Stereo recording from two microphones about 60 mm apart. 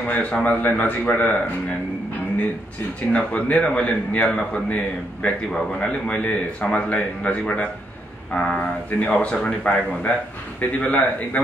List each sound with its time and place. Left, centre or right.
0.0 s a man's voice: left
3.1 s a man's voice: left